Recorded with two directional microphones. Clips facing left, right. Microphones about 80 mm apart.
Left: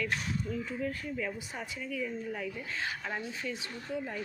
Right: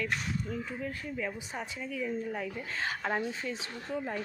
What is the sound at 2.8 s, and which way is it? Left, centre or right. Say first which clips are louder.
Speech: right 6 dB; right.